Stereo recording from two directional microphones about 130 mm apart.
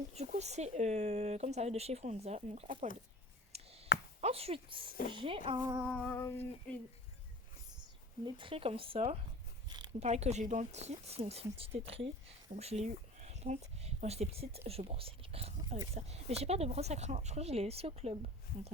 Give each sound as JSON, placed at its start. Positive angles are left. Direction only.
{"t": 0.3, "sound": "speech", "side_deg": -60}
{"t": 3.5, "sound": "a sound", "side_deg": -50}
{"t": 4.2, "sound": "speech", "side_deg": -50}
{"t": 5.5, "sound": "music", "side_deg": -15}
{"t": 5.8, "sound": "music", "side_deg": 0}
{"t": 6.1, "sound": "female singing", "side_deg": 20}
{"t": 8.2, "sound": "speech", "side_deg": -40}
{"t": 9.6, "sound": "a sound", "side_deg": -35}
{"t": 10.0, "sound": "speech", "side_deg": -60}